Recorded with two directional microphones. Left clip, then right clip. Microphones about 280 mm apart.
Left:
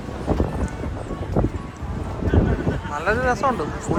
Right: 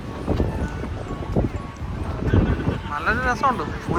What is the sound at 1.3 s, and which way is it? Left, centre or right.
Music, right.